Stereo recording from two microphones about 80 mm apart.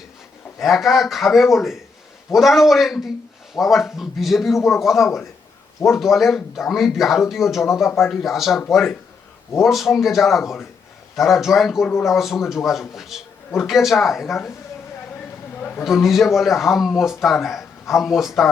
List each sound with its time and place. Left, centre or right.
0.6 s a man's voice: centre
9.6 s a man's voice: centre
15.5 s a sound: left
15.8 s a man's voice: centre